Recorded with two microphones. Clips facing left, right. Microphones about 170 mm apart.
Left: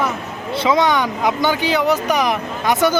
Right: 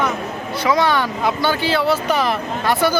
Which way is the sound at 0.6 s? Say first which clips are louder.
Left 1 dB; 20° left (ahead or behind).